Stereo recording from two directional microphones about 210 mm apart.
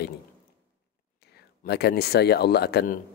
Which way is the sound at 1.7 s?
50° left (ahead or behind).